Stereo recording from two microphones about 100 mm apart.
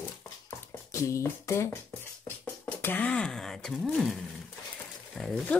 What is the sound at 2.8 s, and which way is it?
Speech, 15° left (ahead or behind).